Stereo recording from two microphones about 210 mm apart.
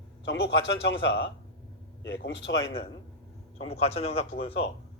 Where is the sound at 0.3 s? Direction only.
55° left (ahead or behind).